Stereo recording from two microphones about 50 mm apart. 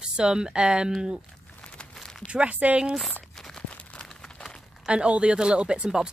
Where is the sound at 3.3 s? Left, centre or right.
Centre.